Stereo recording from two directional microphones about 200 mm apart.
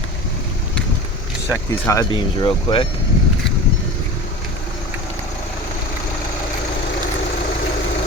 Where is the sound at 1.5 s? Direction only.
15° left (ahead or behind).